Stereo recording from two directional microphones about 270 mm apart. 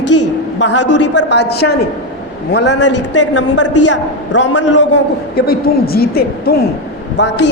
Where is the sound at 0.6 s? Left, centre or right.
Left.